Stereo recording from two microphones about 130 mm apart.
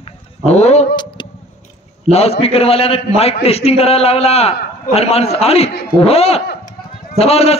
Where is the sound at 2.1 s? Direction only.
50° left (ahead or behind).